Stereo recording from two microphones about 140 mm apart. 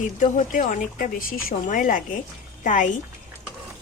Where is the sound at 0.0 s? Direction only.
65° left (ahead or behind).